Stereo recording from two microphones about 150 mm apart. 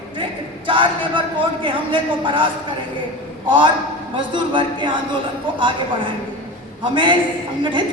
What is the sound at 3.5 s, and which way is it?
A man's voice, 35° right (ahead or behind).